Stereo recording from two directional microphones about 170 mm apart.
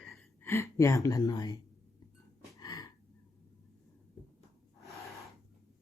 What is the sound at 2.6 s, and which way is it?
Gasp, 25° left (ahead or behind).